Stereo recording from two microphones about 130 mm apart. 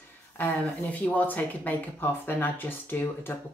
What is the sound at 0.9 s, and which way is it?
Speech, 10° left (ahead or behind).